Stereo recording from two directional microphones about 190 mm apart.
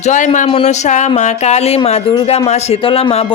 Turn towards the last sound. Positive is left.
turn(degrees=30)  # may be behind; listen again after turning